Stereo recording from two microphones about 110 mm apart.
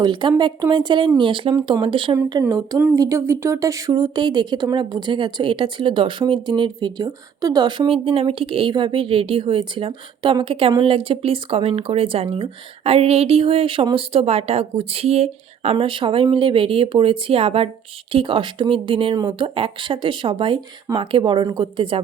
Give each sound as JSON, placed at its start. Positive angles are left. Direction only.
{"t": 0.0, "sound": "speech", "side_deg": -45}
{"t": 2.4, "sound": "speech", "side_deg": -35}
{"t": 7.9, "sound": "speech", "side_deg": -60}